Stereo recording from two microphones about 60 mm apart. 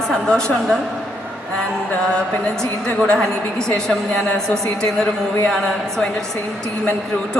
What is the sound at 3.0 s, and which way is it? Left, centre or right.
Speech, centre.